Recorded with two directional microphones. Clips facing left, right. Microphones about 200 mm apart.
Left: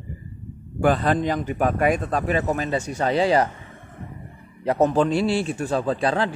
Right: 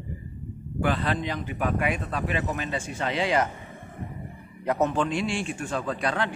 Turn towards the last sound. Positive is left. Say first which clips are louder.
# left 6 dB
turn(degrees=30)  # may be behind; listen again after turning